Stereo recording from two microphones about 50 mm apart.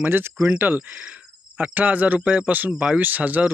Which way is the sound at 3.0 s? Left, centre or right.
Right.